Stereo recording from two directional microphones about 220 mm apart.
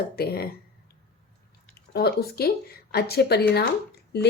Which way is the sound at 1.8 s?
45° left (ahead or behind).